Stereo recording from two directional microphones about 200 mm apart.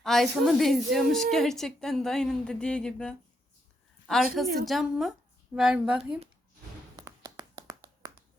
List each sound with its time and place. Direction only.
0.0 s a woman's voice: centre (ahead or behind)
4.4 s a woman's voice: centre (ahead or behind)
6.9 s finger snapping: 20° right (ahead or behind)